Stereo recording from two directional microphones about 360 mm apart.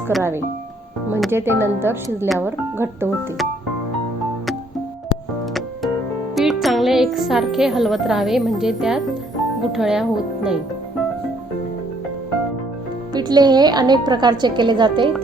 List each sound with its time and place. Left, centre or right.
0.1 s speech: centre
6.3 s a woman's voice: centre
13.1 s speech: centre